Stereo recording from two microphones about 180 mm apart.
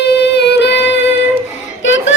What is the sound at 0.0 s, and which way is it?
Music, 65° left (ahead or behind).